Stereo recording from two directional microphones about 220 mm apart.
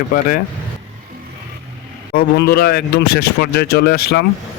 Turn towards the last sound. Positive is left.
turn(degrees=50)  # may be behind; listen again after turning